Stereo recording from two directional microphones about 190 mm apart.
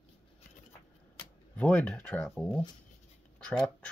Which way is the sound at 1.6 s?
5° left (ahead or behind).